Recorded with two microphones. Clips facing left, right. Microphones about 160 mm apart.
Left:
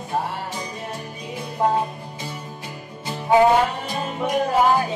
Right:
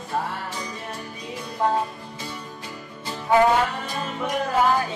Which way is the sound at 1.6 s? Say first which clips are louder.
Left 2 dB; 20° left (ahead or behind).